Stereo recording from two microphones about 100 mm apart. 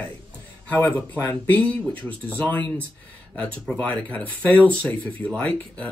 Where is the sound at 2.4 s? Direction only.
15° left (ahead or behind).